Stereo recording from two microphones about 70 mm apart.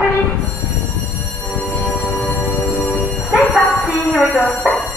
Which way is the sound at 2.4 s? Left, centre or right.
Left.